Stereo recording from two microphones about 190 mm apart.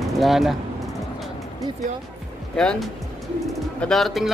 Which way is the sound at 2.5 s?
5° left (ahead or behind).